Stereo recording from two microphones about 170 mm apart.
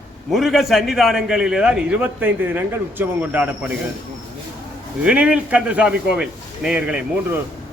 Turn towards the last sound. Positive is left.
turn(degrees=-5)  # may be behind; listen again after turning